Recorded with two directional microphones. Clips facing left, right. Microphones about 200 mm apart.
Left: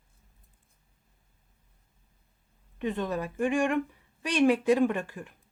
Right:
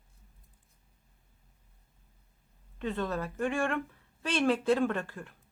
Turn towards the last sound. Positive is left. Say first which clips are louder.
# left 4 dB
turn(degrees=15)  # may be behind; listen again after turning